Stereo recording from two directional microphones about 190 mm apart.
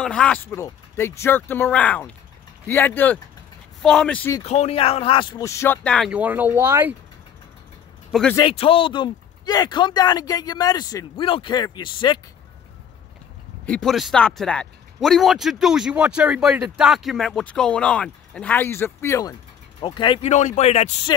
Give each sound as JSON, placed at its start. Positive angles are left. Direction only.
{"t": 0.0, "sound": "speech", "side_deg": 5}
{"t": 4.4, "sound": "speech", "side_deg": 35}
{"t": 8.1, "sound": "speech", "side_deg": 5}
{"t": 8.4, "sound": "speech", "side_deg": 25}
{"t": 13.7, "sound": "speech", "side_deg": 5}
{"t": 19.8, "sound": "speech", "side_deg": 25}